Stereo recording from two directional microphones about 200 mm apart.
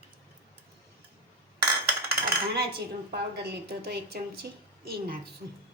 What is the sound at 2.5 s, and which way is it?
A woman's voice, 55° right (ahead or behind).